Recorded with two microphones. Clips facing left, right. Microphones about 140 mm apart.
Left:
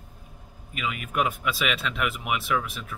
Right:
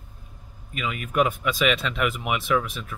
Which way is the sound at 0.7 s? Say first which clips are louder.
Right 4 dB; 5° left (ahead or behind).